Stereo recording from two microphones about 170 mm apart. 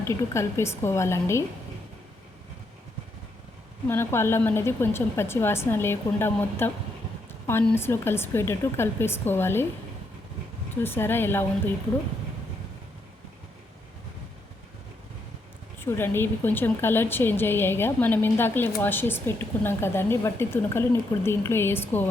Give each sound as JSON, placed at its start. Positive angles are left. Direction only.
{"t": 0.0, "sound": "a woman's voice", "side_deg": 15}
{"t": 3.8, "sound": "a woman's voice", "side_deg": 15}
{"t": 10.8, "sound": "a woman's voice", "side_deg": 15}
{"t": 15.8, "sound": "a woman's voice", "side_deg": 15}